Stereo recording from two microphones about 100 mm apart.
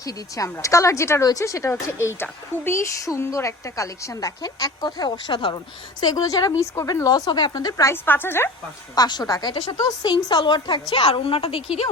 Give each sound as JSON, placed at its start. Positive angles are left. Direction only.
{"t": 0.0, "sound": "a woman's voice", "side_deg": 35}
{"t": 6.0, "sound": "a woman's voice", "side_deg": 40}
{"t": 8.0, "sound": "a woman's voice", "side_deg": 20}
{"t": 9.0, "sound": "a woman's voice", "side_deg": 45}